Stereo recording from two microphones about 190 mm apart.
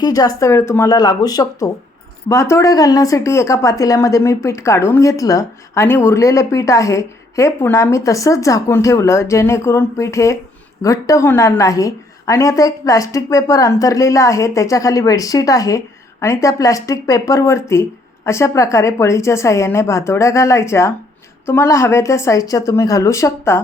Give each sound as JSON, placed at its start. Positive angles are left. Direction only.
{"t": 0.0, "sound": "speech", "side_deg": 20}